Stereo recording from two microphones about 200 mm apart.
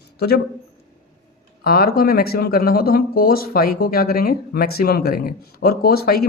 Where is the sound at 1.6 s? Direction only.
50° left (ahead or behind).